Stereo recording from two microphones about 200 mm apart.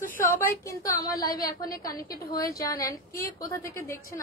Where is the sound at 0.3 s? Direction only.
15° left (ahead or behind).